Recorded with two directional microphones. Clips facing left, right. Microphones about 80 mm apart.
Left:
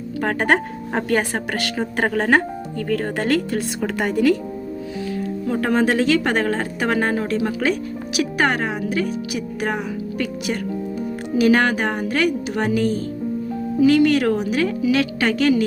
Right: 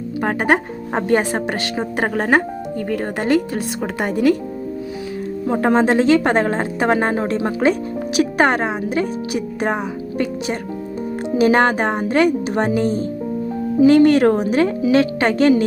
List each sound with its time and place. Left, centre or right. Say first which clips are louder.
0.2 s speech: right 1 dB; centre
5.5 s a woman's voice: right 4 dB; right